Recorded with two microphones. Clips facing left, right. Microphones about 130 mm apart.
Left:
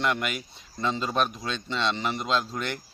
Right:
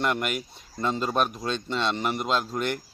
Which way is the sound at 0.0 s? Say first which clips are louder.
Right 1 dB; 45° right (ahead or behind).